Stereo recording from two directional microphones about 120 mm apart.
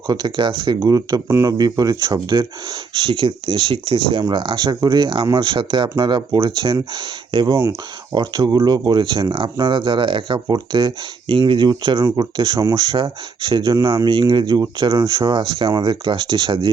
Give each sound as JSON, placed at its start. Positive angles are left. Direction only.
{"t": 0.1, "sound": "speech", "side_deg": -40}